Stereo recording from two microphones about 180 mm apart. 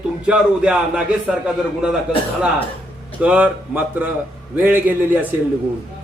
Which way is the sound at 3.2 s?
5° right (ahead or behind).